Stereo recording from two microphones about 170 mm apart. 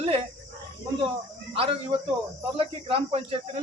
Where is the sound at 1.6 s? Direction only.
35° right (ahead or behind).